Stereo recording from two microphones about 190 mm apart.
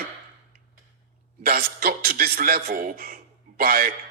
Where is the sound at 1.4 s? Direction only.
55° right (ahead or behind).